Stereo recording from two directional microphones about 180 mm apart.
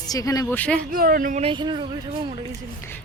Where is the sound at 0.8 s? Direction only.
55° right (ahead or behind); by 1.8 s 25° right (ahead or behind).